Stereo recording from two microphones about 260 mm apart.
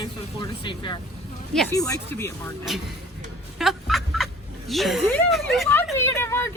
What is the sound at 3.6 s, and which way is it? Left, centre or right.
Fowl, centre.